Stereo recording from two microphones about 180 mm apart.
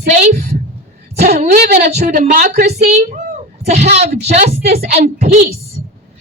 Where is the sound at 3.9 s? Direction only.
40° right (ahead or behind).